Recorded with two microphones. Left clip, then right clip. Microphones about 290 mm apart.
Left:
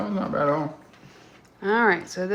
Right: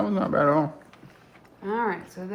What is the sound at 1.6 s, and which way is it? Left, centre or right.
Speech, left.